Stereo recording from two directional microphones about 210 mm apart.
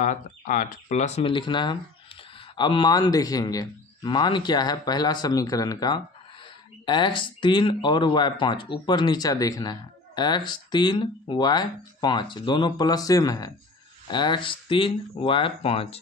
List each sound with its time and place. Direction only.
0.0 s speech: 40° left (ahead or behind)